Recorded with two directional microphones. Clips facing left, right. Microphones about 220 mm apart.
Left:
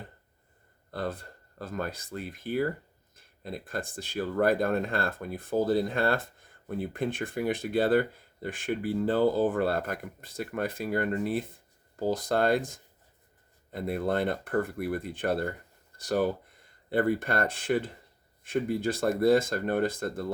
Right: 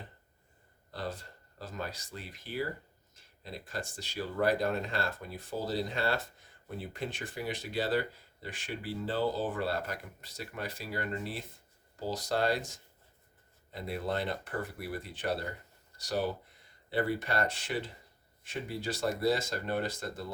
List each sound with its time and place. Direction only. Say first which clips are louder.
0.9 s speech: left 5 dB; 55° left (ahead or behind)